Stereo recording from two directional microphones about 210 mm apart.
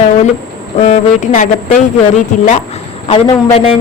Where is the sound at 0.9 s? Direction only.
35° left (ahead or behind).